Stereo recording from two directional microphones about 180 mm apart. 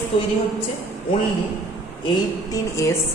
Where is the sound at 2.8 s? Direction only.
15° left (ahead or behind).